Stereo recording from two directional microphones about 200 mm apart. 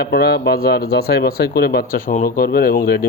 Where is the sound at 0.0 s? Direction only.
55° left (ahead or behind).